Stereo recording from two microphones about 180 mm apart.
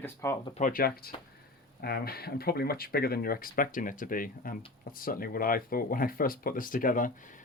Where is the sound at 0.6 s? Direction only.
50° left (ahead or behind).